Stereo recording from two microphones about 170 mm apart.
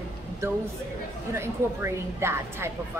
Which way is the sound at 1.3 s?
15° right (ahead or behind).